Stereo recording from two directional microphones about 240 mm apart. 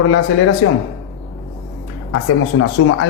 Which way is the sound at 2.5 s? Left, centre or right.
Left.